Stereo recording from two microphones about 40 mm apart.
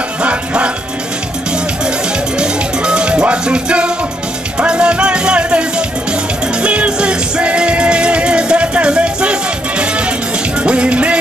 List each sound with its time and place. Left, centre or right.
0.2 s music: right